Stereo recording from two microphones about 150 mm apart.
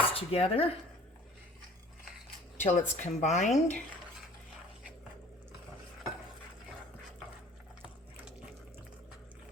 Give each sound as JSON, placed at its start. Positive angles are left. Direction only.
{"t": 0.1, "sound": "speech", "side_deg": 40}
{"t": 2.6, "sound": "a woman's voice", "side_deg": 50}